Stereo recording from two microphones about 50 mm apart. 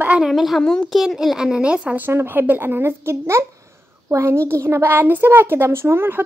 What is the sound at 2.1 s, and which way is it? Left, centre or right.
A woman's voice, right.